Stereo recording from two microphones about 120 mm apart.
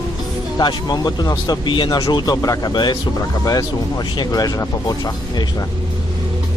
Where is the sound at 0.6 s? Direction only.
35° left (ahead or behind).